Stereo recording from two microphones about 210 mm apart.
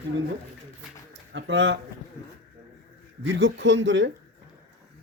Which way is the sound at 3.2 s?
60° right (ahead or behind).